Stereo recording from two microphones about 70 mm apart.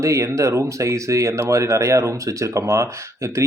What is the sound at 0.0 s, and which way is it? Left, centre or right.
Speech, right.